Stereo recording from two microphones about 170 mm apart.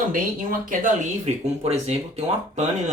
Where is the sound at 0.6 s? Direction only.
50° right (ahead or behind).